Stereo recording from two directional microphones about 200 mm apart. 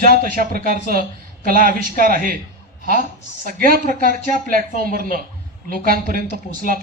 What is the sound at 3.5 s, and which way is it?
A man's voice, 45° right (ahead or behind).